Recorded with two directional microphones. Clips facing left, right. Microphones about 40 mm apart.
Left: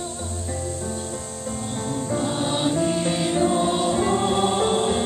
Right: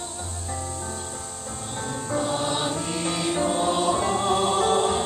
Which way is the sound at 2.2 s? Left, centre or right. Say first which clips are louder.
Left 2 dB; centre.